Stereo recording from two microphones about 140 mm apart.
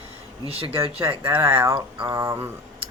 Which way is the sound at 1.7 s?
35° right (ahead or behind).